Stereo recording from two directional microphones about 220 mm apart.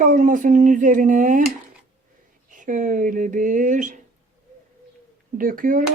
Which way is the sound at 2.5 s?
35° right (ahead or behind).